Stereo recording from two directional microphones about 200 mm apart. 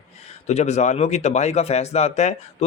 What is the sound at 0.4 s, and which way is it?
Speech, 35° left (ahead or behind).